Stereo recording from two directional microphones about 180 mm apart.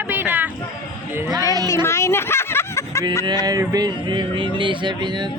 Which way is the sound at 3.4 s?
20° right (ahead or behind).